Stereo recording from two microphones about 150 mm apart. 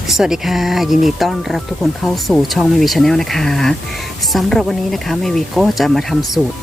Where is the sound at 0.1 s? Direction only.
5° right (ahead or behind).